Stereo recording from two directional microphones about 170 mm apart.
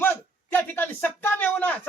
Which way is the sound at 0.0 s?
10° left (ahead or behind).